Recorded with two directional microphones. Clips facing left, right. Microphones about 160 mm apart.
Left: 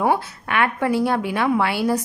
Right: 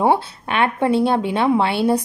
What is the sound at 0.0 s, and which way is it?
Speech, 25° right (ahead or behind).